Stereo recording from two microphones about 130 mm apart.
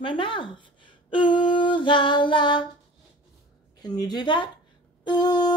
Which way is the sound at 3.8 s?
30° left (ahead or behind).